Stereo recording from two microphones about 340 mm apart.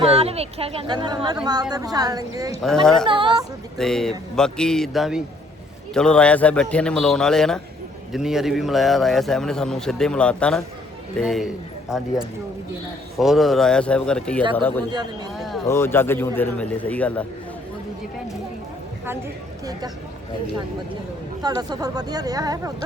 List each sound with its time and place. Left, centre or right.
0.0 s speech: centre
2.6 s a man's voice: centre
3.1 s speech: centre
3.8 s a man's voice: centre
13.1 s a man's voice: centre
14.8 s speech: centre
15.4 s a man's voice: centre
21.4 s speech: centre